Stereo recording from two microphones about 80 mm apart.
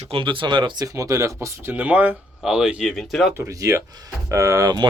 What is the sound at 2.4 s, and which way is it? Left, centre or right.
Speech, centre.